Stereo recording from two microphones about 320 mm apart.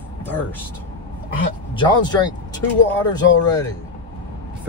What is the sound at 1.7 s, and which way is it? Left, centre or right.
Speech, centre.